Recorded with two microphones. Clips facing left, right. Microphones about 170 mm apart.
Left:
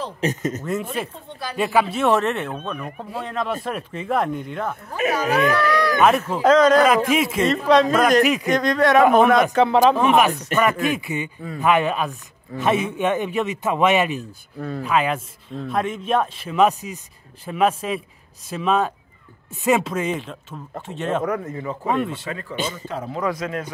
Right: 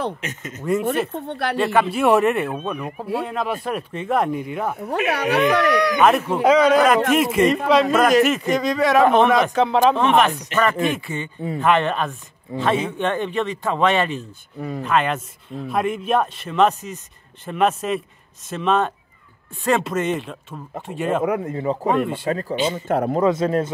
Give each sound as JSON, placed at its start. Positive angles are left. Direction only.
{"t": 0.2, "sound": "speech", "side_deg": 40}
{"t": 0.6, "sound": "speech", "side_deg": 0}
{"t": 1.1, "sound": "speech", "side_deg": -65}
{"t": 1.6, "sound": "speech", "side_deg": 0}
{"t": 2.0, "sound": "speech", "side_deg": -10}
{"t": 4.8, "sound": "speech", "side_deg": -70}
{"t": 5.7, "sound": "a sound", "side_deg": -20}
{"t": 5.9, "sound": "speech", "side_deg": 0}
{"t": 12.5, "sound": "speech", "side_deg": -20}
{"t": 12.9, "sound": "speech", "side_deg": 10}
{"t": 21.5, "sound": "speech", "side_deg": -30}
{"t": 22.8, "sound": "speech", "side_deg": -55}
{"t": 23.2, "sound": "speech", "side_deg": -30}